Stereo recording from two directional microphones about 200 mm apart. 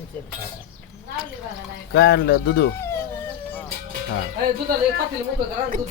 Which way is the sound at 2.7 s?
15° left (ahead or behind).